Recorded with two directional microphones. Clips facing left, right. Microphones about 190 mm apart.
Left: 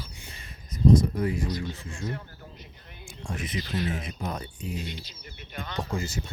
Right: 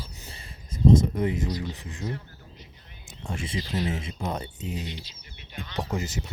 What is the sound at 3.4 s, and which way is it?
Speech, 25° right (ahead or behind).